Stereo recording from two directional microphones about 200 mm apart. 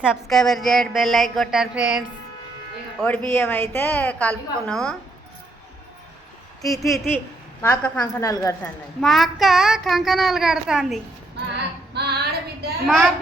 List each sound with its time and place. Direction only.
0.0 s a woman's voice: centre (ahead or behind)
3.0 s a woman's voice: 10° left (ahead or behind)
6.7 s a woman's voice: centre (ahead or behind)
11.9 s female singing: 55° right (ahead or behind)
12.8 s a woman's voice: centre (ahead or behind)